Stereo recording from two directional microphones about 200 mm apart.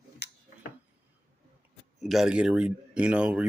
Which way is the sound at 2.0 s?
Centre (ahead or behind).